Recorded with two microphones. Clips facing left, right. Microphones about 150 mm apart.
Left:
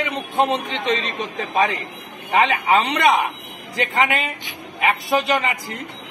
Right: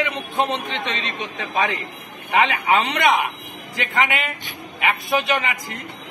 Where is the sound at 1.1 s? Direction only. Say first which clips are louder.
Left 3 dB; 35° left (ahead or behind).